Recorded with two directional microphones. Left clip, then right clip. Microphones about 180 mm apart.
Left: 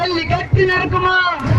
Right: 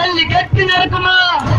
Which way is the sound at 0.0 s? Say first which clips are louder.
Right 5 dB; 25° left (ahead or behind).